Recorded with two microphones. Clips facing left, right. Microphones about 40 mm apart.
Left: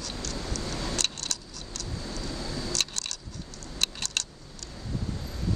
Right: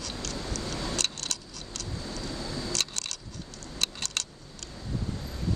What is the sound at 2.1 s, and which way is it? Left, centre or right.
Vehicle, centre.